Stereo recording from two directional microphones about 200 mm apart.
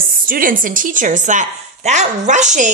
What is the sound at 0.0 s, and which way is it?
A woman's voice, 45° right (ahead or behind).